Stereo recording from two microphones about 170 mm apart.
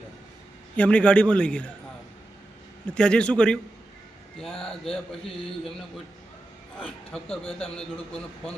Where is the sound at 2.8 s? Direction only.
5° left (ahead or behind).